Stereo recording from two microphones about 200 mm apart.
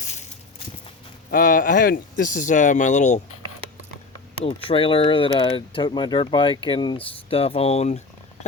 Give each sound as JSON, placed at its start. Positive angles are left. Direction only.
{"t": 0.0, "sound": "clip-clop", "side_deg": 35}
{"t": 1.3, "sound": "speech", "side_deg": 45}
{"t": 4.4, "sound": "speech", "side_deg": 25}